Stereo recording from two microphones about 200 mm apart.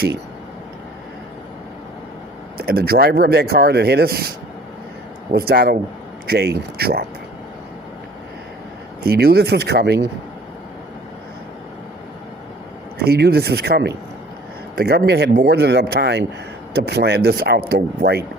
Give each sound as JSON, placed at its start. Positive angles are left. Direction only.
{"t": 2.6, "sound": "speech", "side_deg": -50}
{"t": 5.3, "sound": "speech", "side_deg": -50}
{"t": 9.0, "sound": "speech", "side_deg": -50}
{"t": 13.0, "sound": "speech", "side_deg": -55}